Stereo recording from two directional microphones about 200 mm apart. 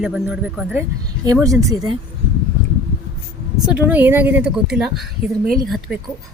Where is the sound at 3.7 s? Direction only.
10° right (ahead or behind).